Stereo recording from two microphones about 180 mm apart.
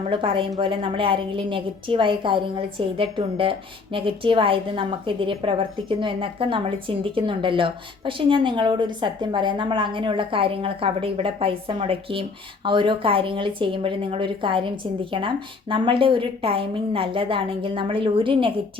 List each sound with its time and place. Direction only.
0.1 s a woman's voice: 30° right (ahead or behind)